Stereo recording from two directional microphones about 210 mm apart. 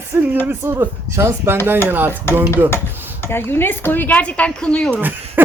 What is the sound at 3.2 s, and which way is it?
Speech, 10° left (ahead or behind).